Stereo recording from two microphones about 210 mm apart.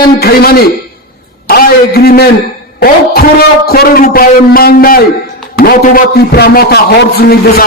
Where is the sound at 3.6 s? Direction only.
45° left (ahead or behind).